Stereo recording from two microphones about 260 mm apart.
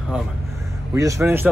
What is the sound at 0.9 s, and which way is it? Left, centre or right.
Speech, centre.